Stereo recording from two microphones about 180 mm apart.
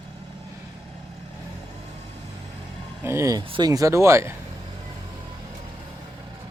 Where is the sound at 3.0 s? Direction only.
15° right (ahead or behind).